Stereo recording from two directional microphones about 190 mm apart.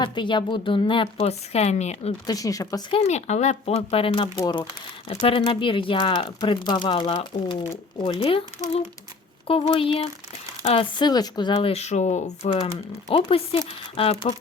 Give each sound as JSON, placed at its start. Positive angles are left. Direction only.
{"t": 0.0, "sound": "speech", "side_deg": 25}
{"t": 2.2, "sound": "speech", "side_deg": 20}
{"t": 3.0, "sound": "speech", "side_deg": 35}
{"t": 13.1, "sound": "speech", "side_deg": 25}